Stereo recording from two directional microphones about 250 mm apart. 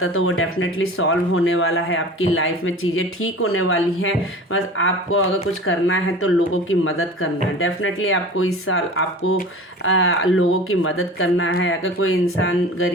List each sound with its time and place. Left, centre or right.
0.0 s speech: left